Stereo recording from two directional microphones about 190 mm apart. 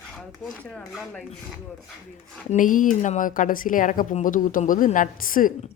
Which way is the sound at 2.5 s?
45° left (ahead or behind).